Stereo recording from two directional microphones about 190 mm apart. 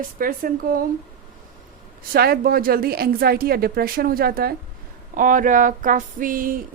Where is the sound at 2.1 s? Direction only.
55° right (ahead or behind).